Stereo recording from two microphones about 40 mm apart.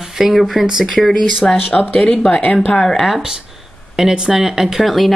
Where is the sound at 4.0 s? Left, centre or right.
Centre.